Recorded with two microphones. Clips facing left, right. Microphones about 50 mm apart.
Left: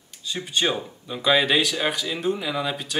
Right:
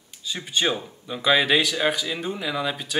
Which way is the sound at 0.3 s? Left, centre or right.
Centre.